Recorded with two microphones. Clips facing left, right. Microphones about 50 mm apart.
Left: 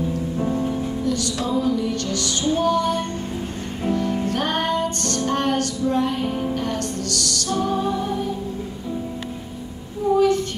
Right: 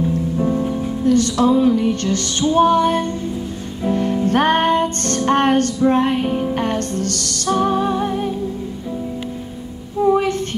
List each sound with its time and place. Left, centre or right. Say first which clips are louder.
0.4 s music: right 2 dB; centre
1.0 s music: right 13 dB; right
10.1 s child singing: left 1 dB; right